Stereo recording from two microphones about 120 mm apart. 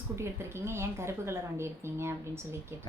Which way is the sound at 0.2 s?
20° right (ahead or behind).